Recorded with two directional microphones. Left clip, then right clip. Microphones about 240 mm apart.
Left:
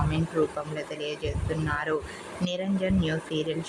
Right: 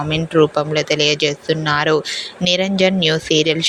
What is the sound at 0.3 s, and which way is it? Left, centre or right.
Speech, right.